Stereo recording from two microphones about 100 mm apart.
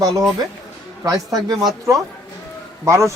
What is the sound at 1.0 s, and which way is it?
Speech, 40° right (ahead or behind).